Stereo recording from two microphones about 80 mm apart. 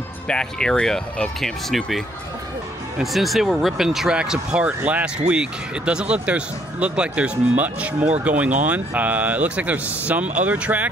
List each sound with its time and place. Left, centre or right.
0.3 s speech: centre